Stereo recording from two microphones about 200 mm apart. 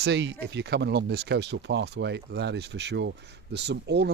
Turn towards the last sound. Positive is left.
turn(degrees=-55)  # may be behind; listen again after turning